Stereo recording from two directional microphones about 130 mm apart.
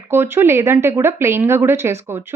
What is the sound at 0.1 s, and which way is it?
Speech, 20° right (ahead or behind).